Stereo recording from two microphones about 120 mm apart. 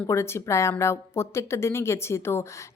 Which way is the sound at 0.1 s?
20° left (ahead or behind).